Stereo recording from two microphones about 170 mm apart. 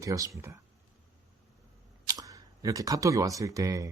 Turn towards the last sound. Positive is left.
turn(degrees=-20)  # may be behind; listen again after turning